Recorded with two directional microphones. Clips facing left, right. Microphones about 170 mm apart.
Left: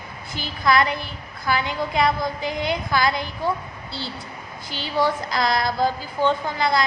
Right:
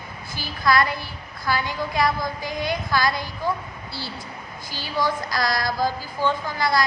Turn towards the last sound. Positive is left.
turn(degrees=20)  # may be behind; listen again after turning